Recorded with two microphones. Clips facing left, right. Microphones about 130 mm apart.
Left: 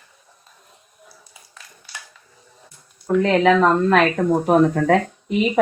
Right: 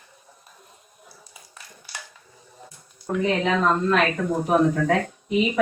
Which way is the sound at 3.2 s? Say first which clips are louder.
Left 6 dB; 90° left.